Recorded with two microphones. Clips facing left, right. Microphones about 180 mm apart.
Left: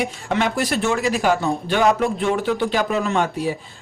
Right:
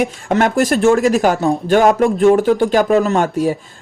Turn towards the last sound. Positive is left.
turn(degrees=-45)  # may be behind; listen again after turning